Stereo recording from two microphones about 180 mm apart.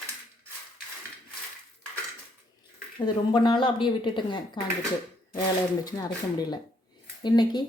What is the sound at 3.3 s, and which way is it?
Speech, 25° left (ahead or behind).